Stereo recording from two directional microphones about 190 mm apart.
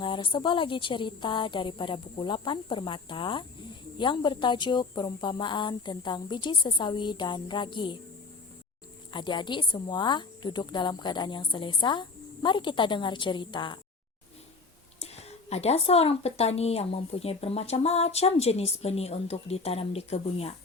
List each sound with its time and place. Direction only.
0.0 s speech: 25° left (ahead or behind)
9.1 s speech: 25° left (ahead or behind)
15.0 s a woman's voice: 35° left (ahead or behind)